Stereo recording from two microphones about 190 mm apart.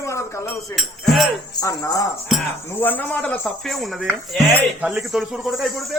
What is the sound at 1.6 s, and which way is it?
Speech, 15° left (ahead or behind).